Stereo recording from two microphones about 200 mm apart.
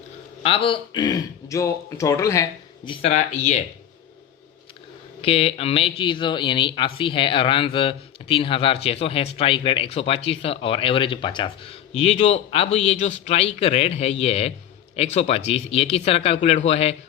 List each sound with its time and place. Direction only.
0.4 s speech: 25° left (ahead or behind)
5.2 s speech: 30° left (ahead or behind)